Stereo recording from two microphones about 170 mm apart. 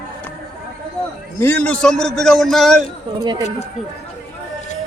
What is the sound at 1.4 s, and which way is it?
A man's voice, 10° left (ahead or behind).